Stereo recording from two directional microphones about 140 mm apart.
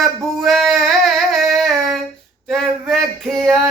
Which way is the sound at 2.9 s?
5° left (ahead or behind).